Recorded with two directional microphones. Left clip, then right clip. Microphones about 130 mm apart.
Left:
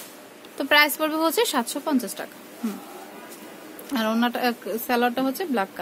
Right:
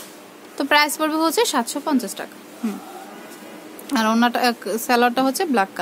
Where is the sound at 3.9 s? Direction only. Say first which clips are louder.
Right 6 dB; 25° right (ahead or behind).